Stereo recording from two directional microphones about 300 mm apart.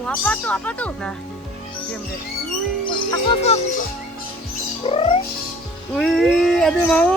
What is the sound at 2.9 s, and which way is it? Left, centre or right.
Speech, centre.